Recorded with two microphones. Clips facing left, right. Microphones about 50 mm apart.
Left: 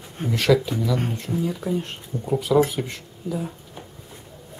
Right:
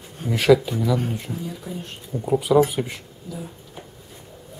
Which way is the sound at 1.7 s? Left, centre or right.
Left.